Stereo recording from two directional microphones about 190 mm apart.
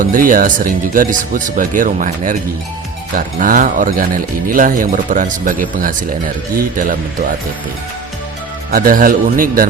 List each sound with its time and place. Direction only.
0.0 s speech: 45° right (ahead or behind)
8.7 s speech: 45° right (ahead or behind)